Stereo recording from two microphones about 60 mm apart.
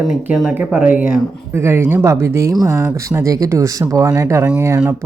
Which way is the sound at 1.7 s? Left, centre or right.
Right.